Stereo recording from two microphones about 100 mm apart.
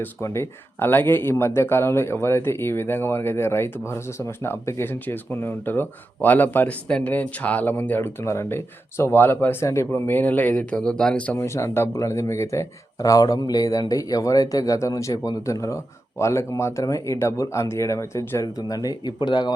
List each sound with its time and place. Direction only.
0.0 s speech: 25° left (ahead or behind); by 11.3 s 10° left (ahead or behind)
11.3 s speech: 30° left (ahead or behind); by 19.5 s 50° left (ahead or behind)